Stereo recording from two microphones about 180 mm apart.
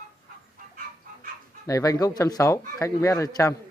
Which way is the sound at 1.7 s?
20° left (ahead or behind).